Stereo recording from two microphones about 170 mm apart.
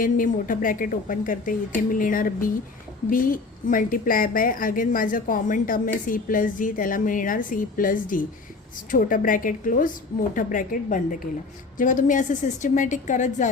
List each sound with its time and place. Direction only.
0.0 s a woman's voice: 55° left (ahead or behind)